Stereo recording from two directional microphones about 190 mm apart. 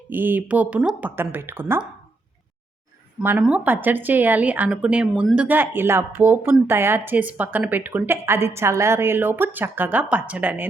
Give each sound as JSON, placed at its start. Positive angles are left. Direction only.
{"t": 0.1, "sound": "a woman's voice", "side_deg": -10}
{"t": 3.2, "sound": "a woman's voice", "side_deg": -5}